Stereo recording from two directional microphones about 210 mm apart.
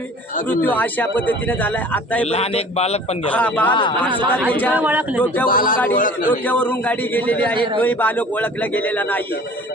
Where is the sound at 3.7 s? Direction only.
25° left (ahead or behind).